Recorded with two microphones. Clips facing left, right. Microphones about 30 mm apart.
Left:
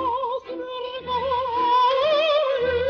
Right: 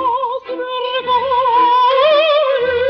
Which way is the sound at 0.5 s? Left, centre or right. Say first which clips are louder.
Right 11 dB; right.